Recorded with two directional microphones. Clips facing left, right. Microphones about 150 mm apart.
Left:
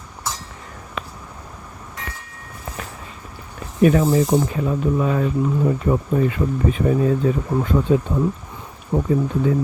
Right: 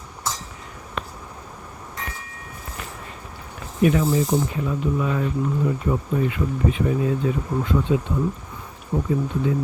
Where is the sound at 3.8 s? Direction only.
45° left (ahead or behind).